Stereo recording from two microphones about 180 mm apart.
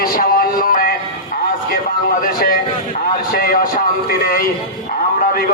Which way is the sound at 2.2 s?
50° left (ahead or behind).